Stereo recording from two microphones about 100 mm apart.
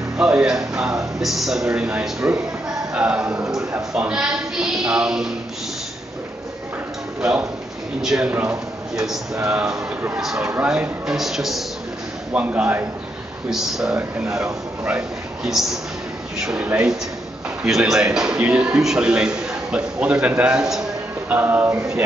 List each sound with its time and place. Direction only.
0.2 s speech: 10° right (ahead or behind)
7.2 s speech: 10° right (ahead or behind)
12.3 s speech: 15° right (ahead or behind)
13.5 s a man's voice: 5° right (ahead or behind)
21.3 s speech: 20° right (ahead or behind)